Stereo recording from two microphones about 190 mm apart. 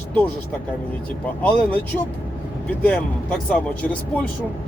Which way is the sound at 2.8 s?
5° left (ahead or behind).